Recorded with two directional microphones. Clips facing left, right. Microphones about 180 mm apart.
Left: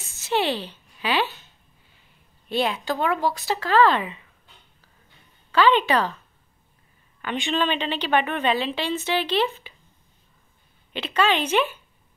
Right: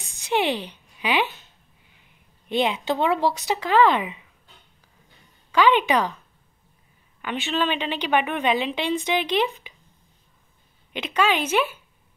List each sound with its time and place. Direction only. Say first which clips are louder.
0.1 s a woman's voice: right 1 dB; 15° right (ahead or behind)
2.4 s a woman's voice: right 1 dB; 20° right (ahead or behind)
5.5 s a woman's voice: even; 15° right (ahead or behind)
7.2 s a woman's voice: left 1 dB; 5° right (ahead or behind)
10.9 s a woman's voice: even; 15° right (ahead or behind)